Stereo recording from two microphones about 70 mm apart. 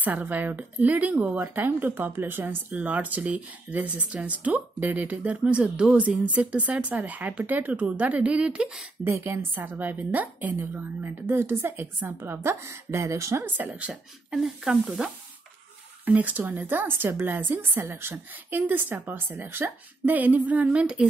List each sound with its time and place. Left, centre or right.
0.0 s speech: right
9.0 s a woman's voice: right
9.6 s a woman's voice: right
14.3 s speech: centre
16.1 s speech: right